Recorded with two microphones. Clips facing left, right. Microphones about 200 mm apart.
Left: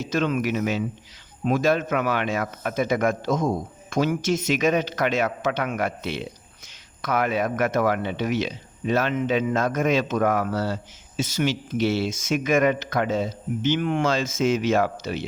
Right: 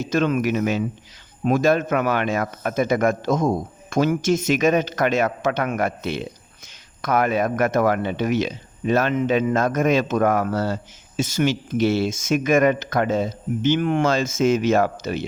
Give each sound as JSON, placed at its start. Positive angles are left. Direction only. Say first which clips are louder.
{"t": 0.0, "sound": "a man's voice", "louder": "right 3 dB", "side_deg": -50}